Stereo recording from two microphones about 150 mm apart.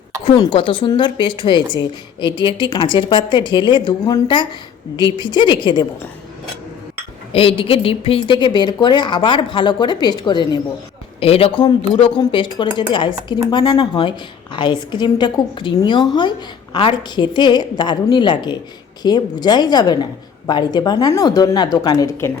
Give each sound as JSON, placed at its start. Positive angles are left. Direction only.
{"t": 0.3, "sound": "a woman's voice", "side_deg": 35}
{"t": 7.3, "sound": "a woman's voice", "side_deg": 40}
{"t": 11.2, "sound": "a woman's voice", "side_deg": 40}